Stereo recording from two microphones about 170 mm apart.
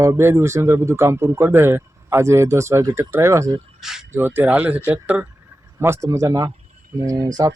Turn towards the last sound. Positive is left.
turn(degrees=-20)  # may be behind; listen again after turning